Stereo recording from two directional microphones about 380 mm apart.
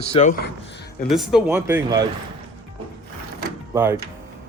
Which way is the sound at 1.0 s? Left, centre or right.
Centre.